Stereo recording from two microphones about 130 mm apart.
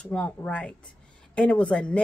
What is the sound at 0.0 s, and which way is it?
Speech, 10° left (ahead or behind).